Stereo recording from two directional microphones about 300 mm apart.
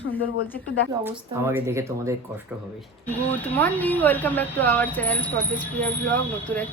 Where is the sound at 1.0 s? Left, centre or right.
Centre.